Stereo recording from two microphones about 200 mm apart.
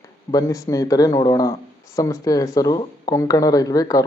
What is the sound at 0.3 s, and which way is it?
A man's voice, 15° left (ahead or behind).